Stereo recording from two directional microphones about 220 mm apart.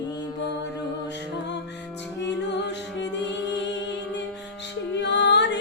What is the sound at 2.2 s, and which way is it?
Music, 55° left (ahead or behind).